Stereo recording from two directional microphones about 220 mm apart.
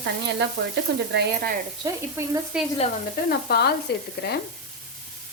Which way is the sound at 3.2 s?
45° left (ahead or behind).